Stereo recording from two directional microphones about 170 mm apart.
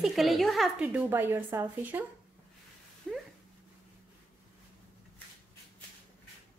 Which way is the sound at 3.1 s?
Centre (ahead or behind).